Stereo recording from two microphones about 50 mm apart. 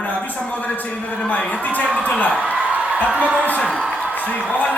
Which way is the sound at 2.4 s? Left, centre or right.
Right.